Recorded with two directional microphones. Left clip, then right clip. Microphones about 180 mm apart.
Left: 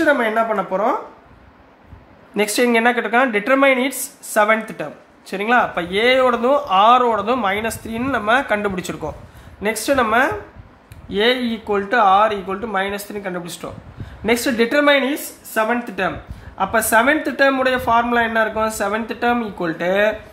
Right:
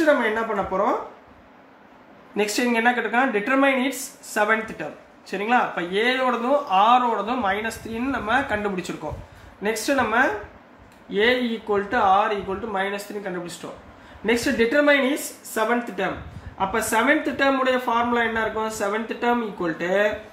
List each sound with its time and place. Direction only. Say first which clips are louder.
0.0 s speech: left 3 dB; 50° left (ahead or behind)
2.3 s speech: left 6 dB; 45° left (ahead or behind)